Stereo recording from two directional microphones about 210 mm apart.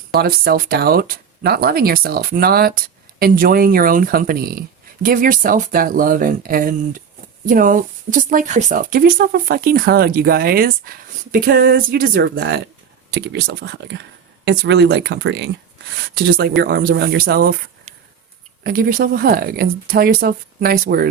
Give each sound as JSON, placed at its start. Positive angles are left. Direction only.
{"t": 0.1, "sound": "speech", "side_deg": -45}
{"t": 18.6, "sound": "speech", "side_deg": -45}